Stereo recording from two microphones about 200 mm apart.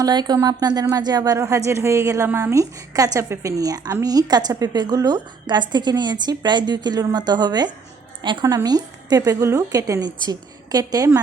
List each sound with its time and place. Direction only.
0.0 s speech: 20° right (ahead or behind)